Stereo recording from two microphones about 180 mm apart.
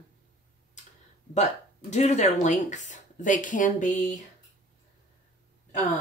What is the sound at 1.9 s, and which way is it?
Speech, 40° left (ahead or behind).